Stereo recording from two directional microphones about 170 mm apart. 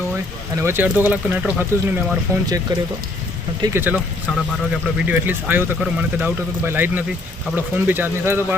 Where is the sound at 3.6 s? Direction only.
15° right (ahead or behind).